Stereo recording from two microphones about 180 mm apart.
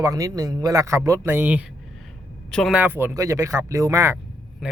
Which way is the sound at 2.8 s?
10° right (ahead or behind).